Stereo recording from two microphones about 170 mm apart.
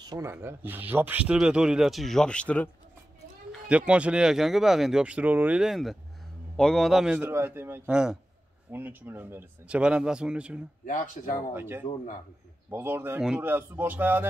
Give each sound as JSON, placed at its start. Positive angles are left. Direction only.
{"t": 0.0, "sound": "speech", "side_deg": -20}
{"t": 3.5, "sound": "speech", "side_deg": -5}
{"t": 11.2, "sound": "speech", "side_deg": 45}
{"t": 11.5, "sound": "speech", "side_deg": -15}